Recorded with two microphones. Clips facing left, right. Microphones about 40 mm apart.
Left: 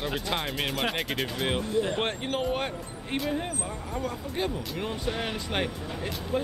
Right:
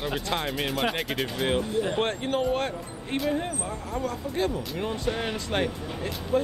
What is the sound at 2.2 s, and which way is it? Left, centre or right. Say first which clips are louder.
Speech: right 3 dB; centre.